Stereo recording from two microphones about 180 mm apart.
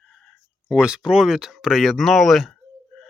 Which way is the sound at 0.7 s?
5° right (ahead or behind).